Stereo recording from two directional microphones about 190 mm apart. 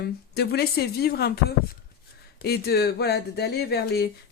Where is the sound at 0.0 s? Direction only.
60° left (ahead or behind).